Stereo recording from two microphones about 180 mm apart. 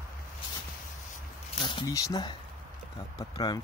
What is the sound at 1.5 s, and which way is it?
Speech, 25° left (ahead or behind).